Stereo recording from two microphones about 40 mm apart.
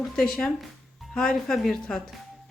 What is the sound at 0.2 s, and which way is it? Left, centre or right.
Speech, centre.